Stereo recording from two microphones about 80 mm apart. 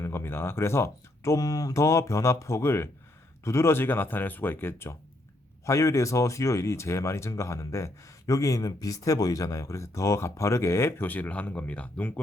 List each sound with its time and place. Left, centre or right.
0.0 s speech: left; by 12.2 s centre